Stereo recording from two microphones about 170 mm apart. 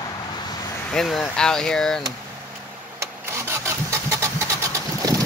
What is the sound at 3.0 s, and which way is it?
Engine starting, 15° right (ahead or behind).